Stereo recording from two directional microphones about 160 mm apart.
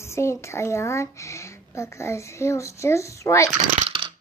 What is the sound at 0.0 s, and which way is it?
Speech, 15° left (ahead or behind).